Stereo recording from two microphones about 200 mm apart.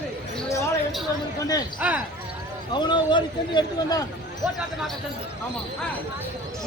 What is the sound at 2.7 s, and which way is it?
A man's voice, 20° left (ahead or behind).